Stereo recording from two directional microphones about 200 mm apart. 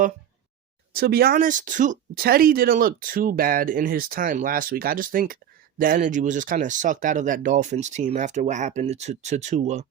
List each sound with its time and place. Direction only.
0.9 s speech: 50° right (ahead or behind)